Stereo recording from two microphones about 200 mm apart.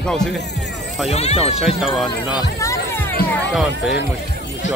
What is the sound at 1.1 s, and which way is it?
Speech, 30° left (ahead or behind).